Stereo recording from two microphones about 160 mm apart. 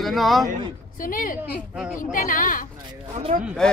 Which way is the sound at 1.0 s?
60° left (ahead or behind).